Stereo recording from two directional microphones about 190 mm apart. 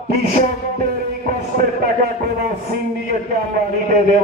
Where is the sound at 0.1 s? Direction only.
50° right (ahead or behind).